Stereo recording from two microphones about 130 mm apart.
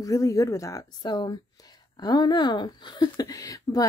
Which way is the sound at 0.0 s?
25° left (ahead or behind).